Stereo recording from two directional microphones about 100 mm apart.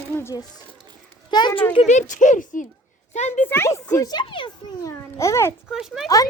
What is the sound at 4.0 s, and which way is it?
Speech, 40° left (ahead or behind).